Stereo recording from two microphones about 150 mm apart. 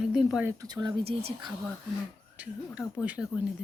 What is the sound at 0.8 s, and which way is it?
Speech, 40° right (ahead or behind).